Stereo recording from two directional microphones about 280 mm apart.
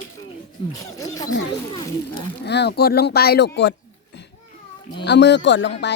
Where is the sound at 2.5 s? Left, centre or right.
Left.